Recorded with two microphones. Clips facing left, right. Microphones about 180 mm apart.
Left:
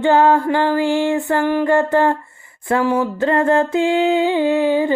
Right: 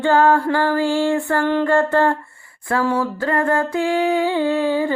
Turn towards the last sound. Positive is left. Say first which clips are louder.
# left 3 dB
turn(degrees=20)  # may be behind; listen again after turning